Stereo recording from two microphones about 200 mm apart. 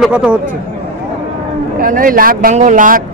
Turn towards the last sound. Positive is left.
turn(degrees=-40)  # may be behind; listen again after turning